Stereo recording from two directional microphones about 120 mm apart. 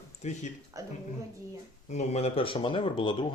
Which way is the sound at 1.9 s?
70° left (ahead or behind).